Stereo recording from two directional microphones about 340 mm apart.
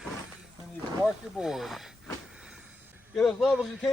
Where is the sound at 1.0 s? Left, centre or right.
Centre.